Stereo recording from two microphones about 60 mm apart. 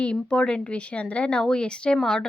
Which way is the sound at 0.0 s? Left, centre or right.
Centre.